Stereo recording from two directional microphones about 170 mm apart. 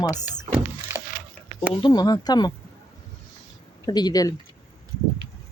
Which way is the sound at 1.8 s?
25° left (ahead or behind).